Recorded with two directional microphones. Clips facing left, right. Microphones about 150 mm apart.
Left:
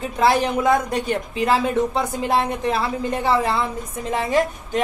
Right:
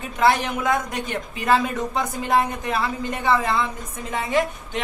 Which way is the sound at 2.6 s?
30° left (ahead or behind).